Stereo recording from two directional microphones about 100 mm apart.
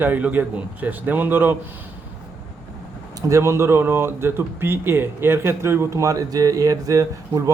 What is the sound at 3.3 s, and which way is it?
Speech, 25° right (ahead or behind).